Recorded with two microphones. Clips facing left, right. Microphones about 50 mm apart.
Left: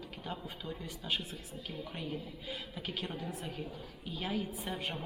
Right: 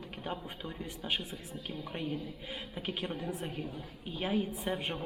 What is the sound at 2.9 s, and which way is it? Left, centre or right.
A woman's voice, right.